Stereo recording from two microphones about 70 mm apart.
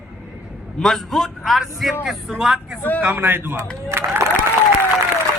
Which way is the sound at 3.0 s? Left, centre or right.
Right.